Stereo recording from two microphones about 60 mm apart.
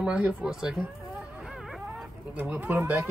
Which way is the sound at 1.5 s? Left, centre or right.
Centre.